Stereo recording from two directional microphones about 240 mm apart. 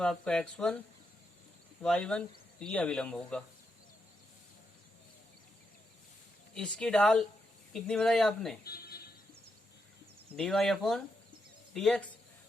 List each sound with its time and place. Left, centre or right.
0.0 s speech: centre
1.8 s speech: centre
6.5 s speech: centre
8.6 s speech: left
10.3 s speech: centre